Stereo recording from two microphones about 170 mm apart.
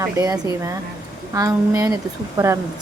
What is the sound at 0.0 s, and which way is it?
A woman's voice, 20° right (ahead or behind).